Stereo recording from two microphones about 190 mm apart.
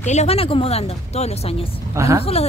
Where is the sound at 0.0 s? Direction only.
35° left (ahead or behind).